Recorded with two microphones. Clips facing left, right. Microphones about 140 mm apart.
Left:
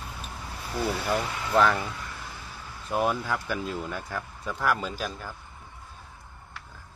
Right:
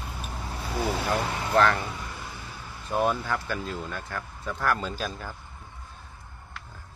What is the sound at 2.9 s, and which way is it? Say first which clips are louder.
Speech: right 1 dB; 5° left (ahead or behind).